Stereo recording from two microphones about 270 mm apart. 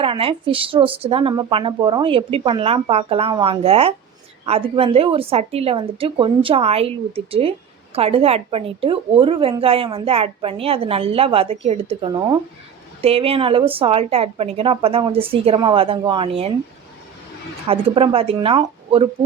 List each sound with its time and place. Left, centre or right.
0.0 s a woman's voice: centre
17.7 s a woman's voice: right